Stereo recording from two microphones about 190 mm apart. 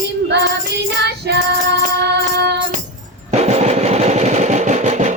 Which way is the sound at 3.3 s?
35° right (ahead or behind).